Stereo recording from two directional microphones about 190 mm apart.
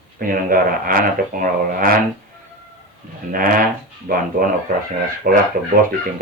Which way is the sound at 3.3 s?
45° right (ahead or behind).